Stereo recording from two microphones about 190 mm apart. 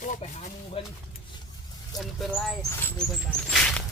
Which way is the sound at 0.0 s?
40° left (ahead or behind).